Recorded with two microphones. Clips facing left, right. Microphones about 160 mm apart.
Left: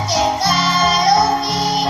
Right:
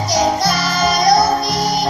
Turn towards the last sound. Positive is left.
turn(degrees=-40)  # may be behind; listen again after turning